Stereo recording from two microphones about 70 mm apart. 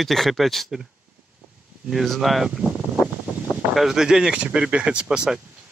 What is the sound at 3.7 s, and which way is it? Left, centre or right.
Speech, centre.